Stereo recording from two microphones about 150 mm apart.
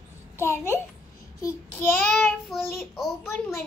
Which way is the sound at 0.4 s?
15° left (ahead or behind).